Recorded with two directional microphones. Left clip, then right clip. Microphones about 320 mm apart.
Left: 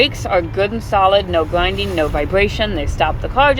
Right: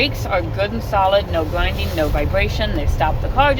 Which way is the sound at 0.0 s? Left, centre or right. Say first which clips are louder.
Left 4 dB; left.